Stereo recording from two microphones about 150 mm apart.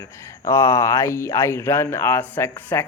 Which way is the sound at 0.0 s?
20° left (ahead or behind).